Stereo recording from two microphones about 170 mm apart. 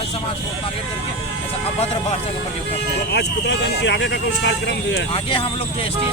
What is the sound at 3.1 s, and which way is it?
Speech, 90° left.